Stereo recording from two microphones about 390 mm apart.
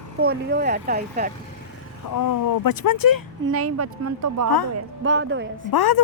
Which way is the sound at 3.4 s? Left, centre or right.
Right.